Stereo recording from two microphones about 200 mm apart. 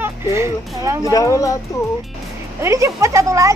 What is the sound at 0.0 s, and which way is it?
Speech, 15° right (ahead or behind).